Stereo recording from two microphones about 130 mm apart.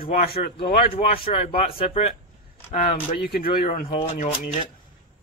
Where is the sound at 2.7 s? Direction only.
80° left.